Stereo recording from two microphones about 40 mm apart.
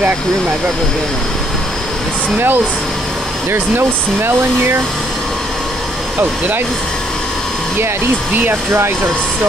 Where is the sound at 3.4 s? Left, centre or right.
Right.